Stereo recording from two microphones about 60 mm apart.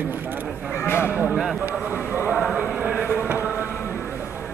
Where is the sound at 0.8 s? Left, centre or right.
Left.